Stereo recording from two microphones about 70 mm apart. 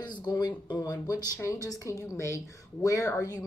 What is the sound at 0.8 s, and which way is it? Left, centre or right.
Speech, left.